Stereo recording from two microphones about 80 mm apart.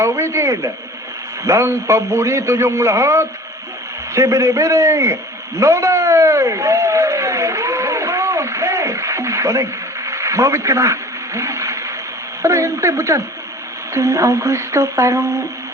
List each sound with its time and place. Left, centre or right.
0.0 s a man's voice: right
5.5 s a sound: right
10.1 s a man's voice: right